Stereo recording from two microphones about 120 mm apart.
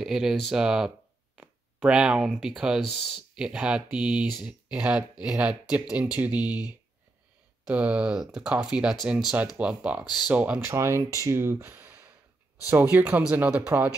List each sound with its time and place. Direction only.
0.0 s speech: 5° right (ahead or behind)
7.6 s speech: 10° right (ahead or behind)